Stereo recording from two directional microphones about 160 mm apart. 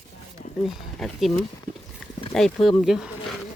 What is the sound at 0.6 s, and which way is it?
Speech, centre (ahead or behind).